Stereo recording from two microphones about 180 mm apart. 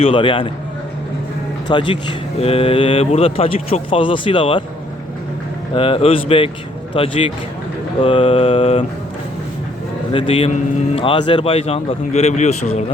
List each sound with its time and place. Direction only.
0.0 s a man's voice: 30° left (ahead or behind)
1.6 s speech: 25° left (ahead or behind)
5.7 s speech: 30° left (ahead or behind)
10.1 s speech: 30° left (ahead or behind)